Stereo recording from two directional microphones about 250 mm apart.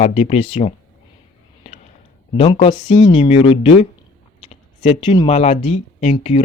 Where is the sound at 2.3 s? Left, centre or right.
Left.